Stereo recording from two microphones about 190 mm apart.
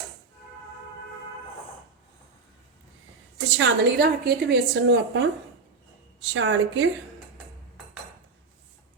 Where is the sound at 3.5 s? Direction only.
65° right (ahead or behind).